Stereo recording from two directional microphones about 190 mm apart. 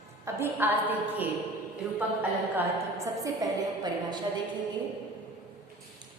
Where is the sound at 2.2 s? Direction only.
15° right (ahead or behind).